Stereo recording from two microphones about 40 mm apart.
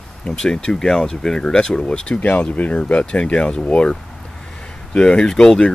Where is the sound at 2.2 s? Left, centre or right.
Left.